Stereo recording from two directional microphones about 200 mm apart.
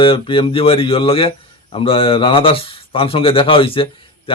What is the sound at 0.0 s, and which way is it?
Speech, 25° left (ahead or behind).